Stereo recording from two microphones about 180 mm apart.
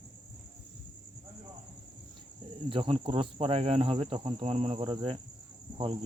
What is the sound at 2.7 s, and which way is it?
Speech, 30° right (ahead or behind).